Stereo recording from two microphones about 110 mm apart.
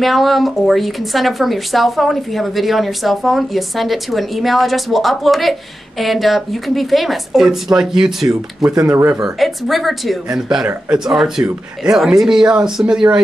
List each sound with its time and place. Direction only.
0.0 s speech: centre (ahead or behind)
8.6 s speech: 25° right (ahead or behind)
9.2 s speech: centre (ahead or behind)